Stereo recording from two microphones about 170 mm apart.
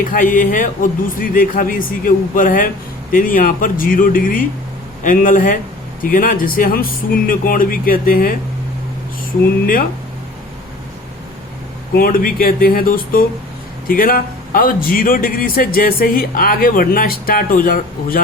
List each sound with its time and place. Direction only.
0.0 s speech: 55° left (ahead or behind)
11.9 s speech: 55° left (ahead or behind)